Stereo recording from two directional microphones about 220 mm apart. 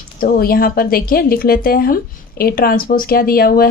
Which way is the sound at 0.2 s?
40° left (ahead or behind).